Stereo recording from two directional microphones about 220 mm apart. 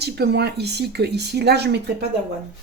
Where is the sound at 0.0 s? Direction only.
50° right (ahead or behind).